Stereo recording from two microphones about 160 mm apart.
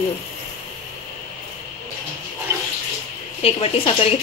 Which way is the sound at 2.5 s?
15° right (ahead or behind).